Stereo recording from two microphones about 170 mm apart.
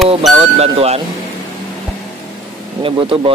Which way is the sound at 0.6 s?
40° right (ahead or behind).